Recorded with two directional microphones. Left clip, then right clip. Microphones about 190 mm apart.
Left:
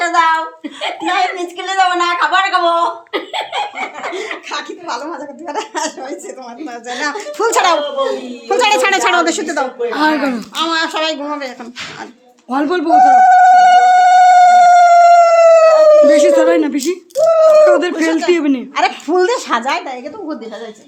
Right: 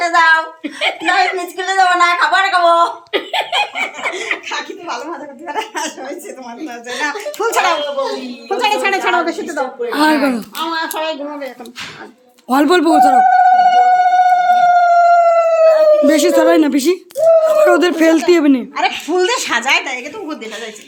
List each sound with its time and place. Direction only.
0.0 s speech: 5° right (ahead or behind)
3.1 s laughter: 10° right (ahead or behind)
4.4 s a woman's voice: 60° left (ahead or behind)
9.9 s speech: 15° right (ahead or behind)
10.6 s a woman's voice: 55° left (ahead or behind)
12.5 s a man's voice: 30° right (ahead or behind)
13.1 s a sound: 50° left (ahead or behind)
16.1 s a woman's voice: 20° right (ahead or behind)
18.7 s a woman's voice: 45° left (ahead or behind)